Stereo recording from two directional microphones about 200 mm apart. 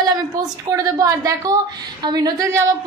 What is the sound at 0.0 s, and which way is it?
A woman's voice, 15° right (ahead or behind).